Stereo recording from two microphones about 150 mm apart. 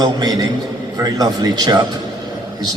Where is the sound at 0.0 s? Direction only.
25° right (ahead or behind).